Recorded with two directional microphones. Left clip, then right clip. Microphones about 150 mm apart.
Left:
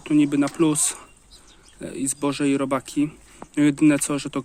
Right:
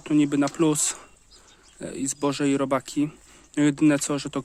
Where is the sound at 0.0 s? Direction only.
45° right (ahead or behind).